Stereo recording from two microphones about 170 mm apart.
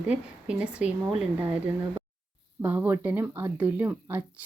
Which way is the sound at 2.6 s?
10° right (ahead or behind).